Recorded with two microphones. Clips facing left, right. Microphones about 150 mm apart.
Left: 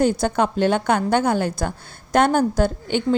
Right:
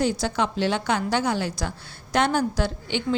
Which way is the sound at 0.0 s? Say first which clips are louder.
Left 5 dB; 50° left (ahead or behind).